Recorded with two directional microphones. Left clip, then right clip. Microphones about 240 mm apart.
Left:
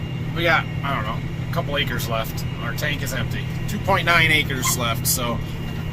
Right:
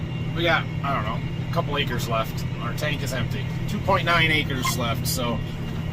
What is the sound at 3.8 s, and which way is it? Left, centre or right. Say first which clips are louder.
Speech: left 3 dB; centre.